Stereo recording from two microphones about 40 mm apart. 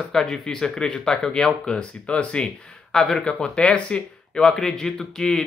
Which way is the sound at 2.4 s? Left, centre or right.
Centre.